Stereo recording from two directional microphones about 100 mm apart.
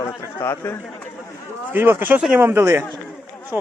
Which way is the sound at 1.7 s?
20° right (ahead or behind).